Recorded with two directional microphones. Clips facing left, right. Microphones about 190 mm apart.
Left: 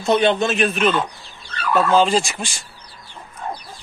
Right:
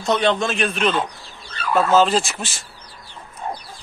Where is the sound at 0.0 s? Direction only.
10° left (ahead or behind).